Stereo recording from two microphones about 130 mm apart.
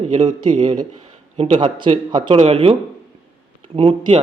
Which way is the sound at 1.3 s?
55° right (ahead or behind).